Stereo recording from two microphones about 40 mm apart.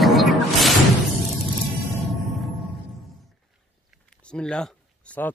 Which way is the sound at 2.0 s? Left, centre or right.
Centre.